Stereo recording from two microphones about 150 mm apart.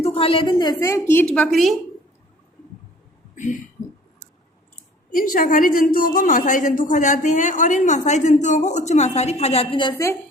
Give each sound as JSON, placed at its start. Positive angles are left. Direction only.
{"t": 0.0, "sound": "a woman's voice", "side_deg": 40}
{"t": 3.3, "sound": "speech", "side_deg": 55}
{"t": 5.1, "sound": "a woman's voice", "side_deg": 70}
{"t": 9.7, "sound": "a woman's voice", "side_deg": 30}